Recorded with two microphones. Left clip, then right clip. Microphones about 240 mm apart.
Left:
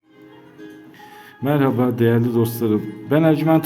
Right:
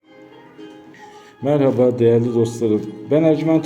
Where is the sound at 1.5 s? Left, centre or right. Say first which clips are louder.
Right 4 dB; left.